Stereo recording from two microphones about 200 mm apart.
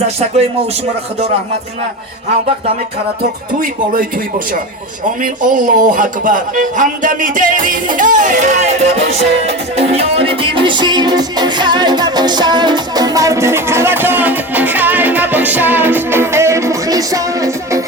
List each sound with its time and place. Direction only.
3.2 s speech: 45° right (ahead or behind)
5.2 s speech: 40° right (ahead or behind)
9.7 s music: 30° right (ahead or behind)